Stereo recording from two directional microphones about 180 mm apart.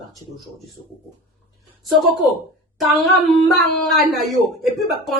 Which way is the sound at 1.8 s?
Centre (ahead or behind).